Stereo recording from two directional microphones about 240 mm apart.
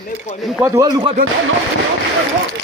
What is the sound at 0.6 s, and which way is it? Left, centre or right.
Speech, centre.